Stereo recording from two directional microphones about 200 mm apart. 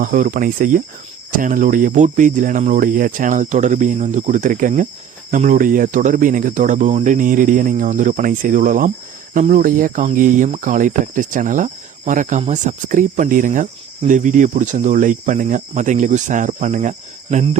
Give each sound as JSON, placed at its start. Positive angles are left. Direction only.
{"t": 0.0, "sound": "speech", "side_deg": -40}